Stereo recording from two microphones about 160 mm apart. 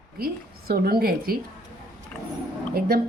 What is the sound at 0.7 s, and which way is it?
Speech, 75° right (ahead or behind).